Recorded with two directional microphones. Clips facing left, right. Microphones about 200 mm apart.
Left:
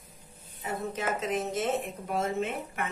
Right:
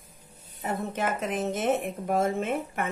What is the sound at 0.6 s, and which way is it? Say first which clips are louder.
A woman's voice: right 3 dB; 55° right (ahead or behind).